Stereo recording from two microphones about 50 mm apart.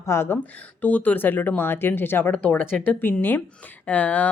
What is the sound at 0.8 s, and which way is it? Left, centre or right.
Speech, left.